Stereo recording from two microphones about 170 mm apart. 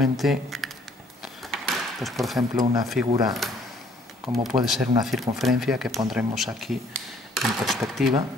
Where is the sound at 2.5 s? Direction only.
20° right (ahead or behind).